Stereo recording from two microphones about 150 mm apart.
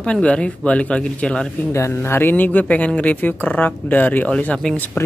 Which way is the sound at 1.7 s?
20° left (ahead or behind).